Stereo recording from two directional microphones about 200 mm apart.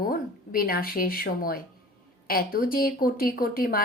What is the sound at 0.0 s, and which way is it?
Speech, 50° left (ahead or behind).